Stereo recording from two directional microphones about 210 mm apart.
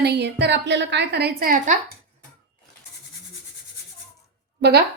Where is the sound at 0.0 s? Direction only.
55° right (ahead or behind).